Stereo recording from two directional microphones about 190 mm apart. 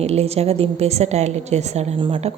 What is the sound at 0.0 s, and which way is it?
A woman's voice, 35° right (ahead or behind).